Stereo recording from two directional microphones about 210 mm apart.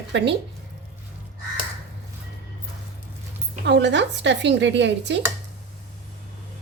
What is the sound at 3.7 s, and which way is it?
A woman's voice, 55° right (ahead or behind).